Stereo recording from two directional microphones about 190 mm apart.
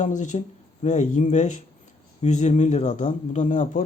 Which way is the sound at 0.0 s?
40° left (ahead or behind).